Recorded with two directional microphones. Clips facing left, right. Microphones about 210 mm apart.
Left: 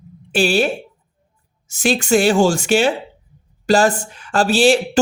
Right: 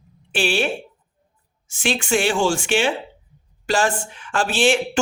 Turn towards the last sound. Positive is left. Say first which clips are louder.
# left 5 dB
turn(degrees=40)  # may be behind; listen again after turning